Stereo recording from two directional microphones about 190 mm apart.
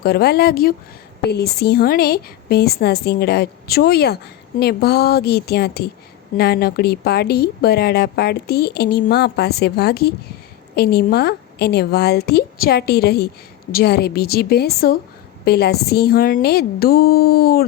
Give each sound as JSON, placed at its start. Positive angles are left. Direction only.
{"t": 0.0, "sound": "a woman's voice", "side_deg": 55}